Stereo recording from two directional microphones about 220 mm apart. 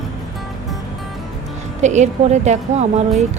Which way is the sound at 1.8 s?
30° right (ahead or behind).